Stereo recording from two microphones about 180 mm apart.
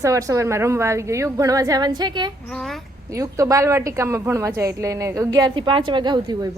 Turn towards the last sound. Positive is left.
turn(degrees=-25)  # may be behind; listen again after turning